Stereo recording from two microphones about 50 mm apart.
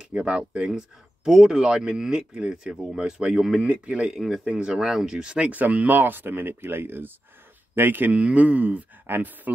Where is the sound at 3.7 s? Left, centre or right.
Right.